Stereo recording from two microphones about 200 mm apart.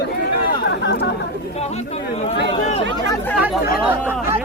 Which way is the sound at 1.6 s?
30° left (ahead or behind).